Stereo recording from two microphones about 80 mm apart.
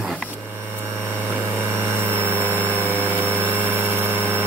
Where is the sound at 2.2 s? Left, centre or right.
Right.